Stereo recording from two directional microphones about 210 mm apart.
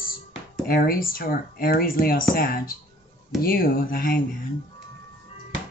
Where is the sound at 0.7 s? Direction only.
45° left (ahead or behind).